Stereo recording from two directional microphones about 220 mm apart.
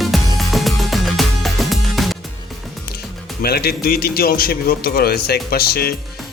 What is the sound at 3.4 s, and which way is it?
Speech, 45° left (ahead or behind).